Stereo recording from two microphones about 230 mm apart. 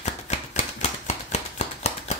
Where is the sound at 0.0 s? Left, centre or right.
Left.